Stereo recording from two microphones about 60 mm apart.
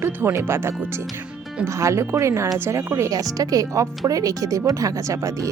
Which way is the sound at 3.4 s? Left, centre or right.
Right.